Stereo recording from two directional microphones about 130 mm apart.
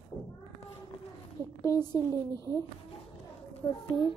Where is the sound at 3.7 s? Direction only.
40° left (ahead or behind).